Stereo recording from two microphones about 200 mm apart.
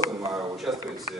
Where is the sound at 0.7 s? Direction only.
5° right (ahead or behind).